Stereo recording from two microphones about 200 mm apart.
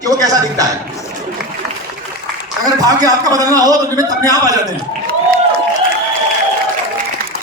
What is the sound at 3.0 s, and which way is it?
A man's voice, 20° right (ahead or behind).